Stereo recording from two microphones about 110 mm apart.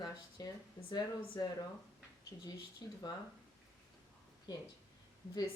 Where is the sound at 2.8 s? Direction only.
35° left (ahead or behind).